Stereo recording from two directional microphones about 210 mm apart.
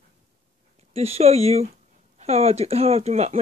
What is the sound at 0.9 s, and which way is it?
Speech, 30° right (ahead or behind).